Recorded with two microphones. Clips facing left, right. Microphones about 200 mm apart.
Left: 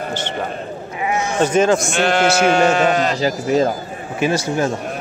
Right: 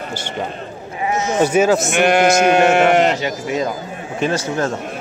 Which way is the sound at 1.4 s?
10° right (ahead or behind).